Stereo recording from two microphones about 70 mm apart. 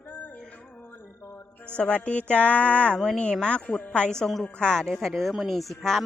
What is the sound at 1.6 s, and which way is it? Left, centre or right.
A woman's voice, centre.